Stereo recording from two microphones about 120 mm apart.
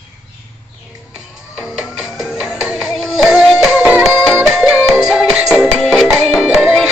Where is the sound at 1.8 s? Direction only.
10° right (ahead or behind).